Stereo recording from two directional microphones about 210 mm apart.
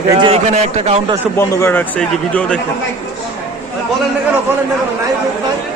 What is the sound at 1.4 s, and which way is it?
A man's voice, 15° left (ahead or behind).